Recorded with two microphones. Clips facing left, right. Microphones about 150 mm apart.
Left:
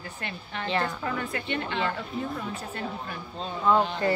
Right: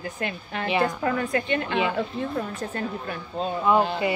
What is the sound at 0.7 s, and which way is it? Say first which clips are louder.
Speech: right 5 dB; 15° right (ahead or behind).